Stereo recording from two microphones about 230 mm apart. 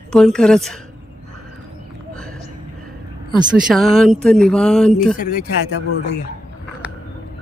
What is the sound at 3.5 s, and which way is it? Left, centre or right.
Speech, centre.